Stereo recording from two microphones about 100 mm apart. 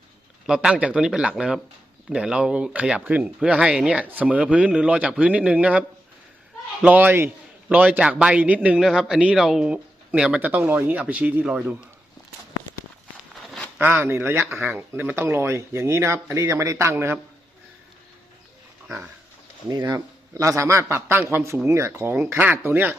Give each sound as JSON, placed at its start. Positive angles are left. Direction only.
{"t": 0.4, "sound": "speech", "side_deg": -5}
{"t": 6.8, "sound": "speech", "side_deg": -15}
{"t": 10.5, "sound": "speech", "side_deg": -20}
{"t": 13.7, "sound": "speech", "side_deg": -20}
{"t": 19.8, "sound": "speech", "side_deg": -30}